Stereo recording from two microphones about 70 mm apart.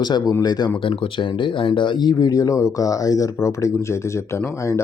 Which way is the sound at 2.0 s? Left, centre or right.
Left.